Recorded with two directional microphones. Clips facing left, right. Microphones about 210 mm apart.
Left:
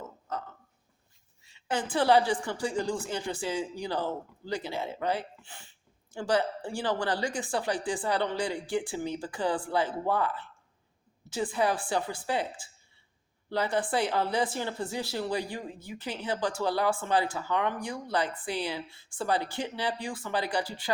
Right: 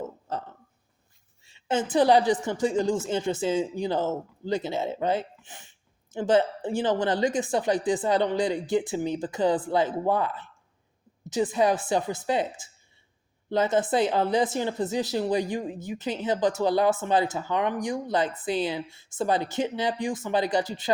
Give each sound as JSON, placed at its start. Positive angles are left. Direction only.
{"t": 1.5, "sound": "a woman's voice", "side_deg": -25}